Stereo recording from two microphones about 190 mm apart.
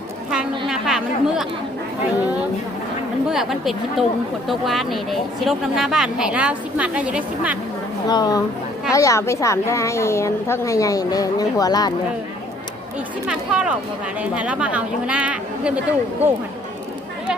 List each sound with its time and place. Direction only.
0.7 s speech: centre (ahead or behind)
3.2 s speech: centre (ahead or behind)
8.0 s a woman's voice: 20° left (ahead or behind)
13.2 s speech: 5° right (ahead or behind)